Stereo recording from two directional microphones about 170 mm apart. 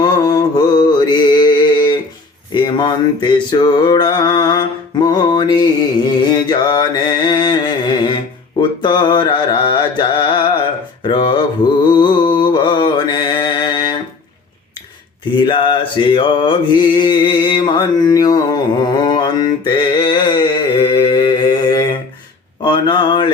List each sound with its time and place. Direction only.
0.0 s mantra: 25° left (ahead or behind)
6.3 s music: 25° left (ahead or behind)
15.4 s mantra: 30° left (ahead or behind)
22.6 s a sound: 25° left (ahead or behind)